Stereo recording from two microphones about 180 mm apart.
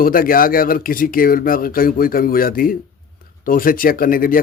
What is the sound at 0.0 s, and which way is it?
Speech, 50° left (ahead or behind).